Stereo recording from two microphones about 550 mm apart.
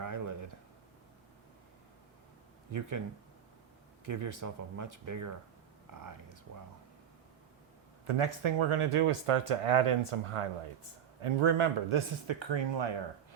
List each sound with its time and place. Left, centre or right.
0.0 s a sound: right
4.0 s speech: right
8.0 s speech: right